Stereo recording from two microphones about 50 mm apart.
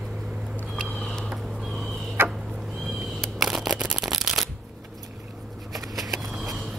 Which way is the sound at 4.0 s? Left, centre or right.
Centre.